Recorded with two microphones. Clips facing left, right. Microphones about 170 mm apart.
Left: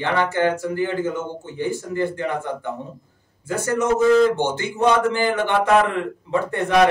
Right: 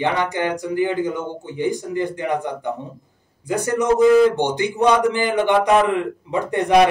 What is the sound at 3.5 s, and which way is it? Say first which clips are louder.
A man's voice: right 2 dB; 15° right (ahead or behind).